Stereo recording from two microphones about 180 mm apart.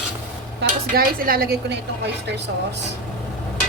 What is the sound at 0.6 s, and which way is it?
Speech, 55° right (ahead or behind).